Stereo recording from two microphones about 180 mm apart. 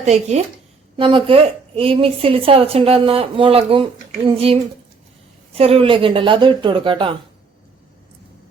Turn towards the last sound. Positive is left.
turn(degrees=-30)  # may be behind; listen again after turning